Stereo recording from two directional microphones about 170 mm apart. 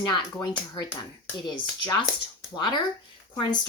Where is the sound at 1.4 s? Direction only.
25° left (ahead or behind).